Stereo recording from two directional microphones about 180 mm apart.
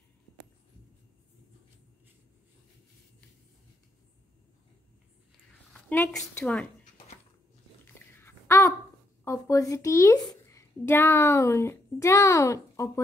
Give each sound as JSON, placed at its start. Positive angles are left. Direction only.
{"t": 5.7, "sound": "a woman's voice", "side_deg": 5}
{"t": 8.1, "sound": "a sound", "side_deg": 15}
{"t": 9.2, "sound": "a child's voice", "side_deg": 15}